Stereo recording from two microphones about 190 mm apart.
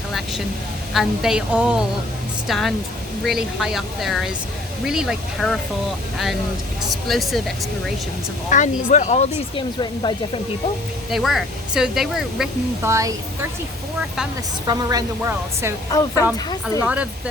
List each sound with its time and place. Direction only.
0.9 s speech: 5° right (ahead or behind)
6.8 s speech: centre (ahead or behind)
8.4 s speech: 40° left (ahead or behind)
9.6 s speech: 25° left (ahead or behind)
11.1 s speech: centre (ahead or behind)
12.8 s speech: 15° right (ahead or behind)
14.7 s speech: 20° right (ahead or behind)
15.9 s speech: 20° left (ahead or behind)
16.8 s speech: 5° right (ahead or behind)